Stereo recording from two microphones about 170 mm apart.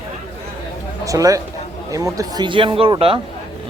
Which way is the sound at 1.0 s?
20° right (ahead or behind).